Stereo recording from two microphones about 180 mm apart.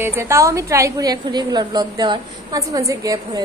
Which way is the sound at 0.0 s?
15° right (ahead or behind).